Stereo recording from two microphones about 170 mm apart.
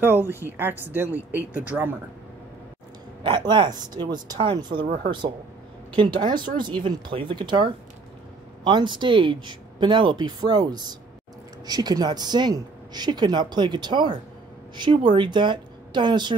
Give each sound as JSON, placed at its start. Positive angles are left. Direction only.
{"t": 0.0, "sound": "speech", "side_deg": -10}
{"t": 3.3, "sound": "speech", "side_deg": -25}
{"t": 5.9, "sound": "speech", "side_deg": -25}